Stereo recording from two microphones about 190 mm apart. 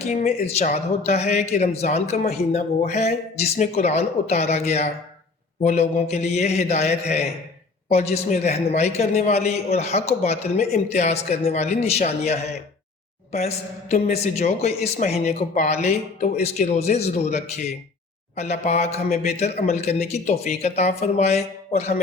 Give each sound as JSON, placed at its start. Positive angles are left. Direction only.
{"t": 0.0, "sound": "speech", "side_deg": 35}